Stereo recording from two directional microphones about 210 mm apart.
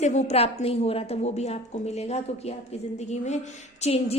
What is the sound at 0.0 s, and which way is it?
A woman's voice, 35° left (ahead or behind).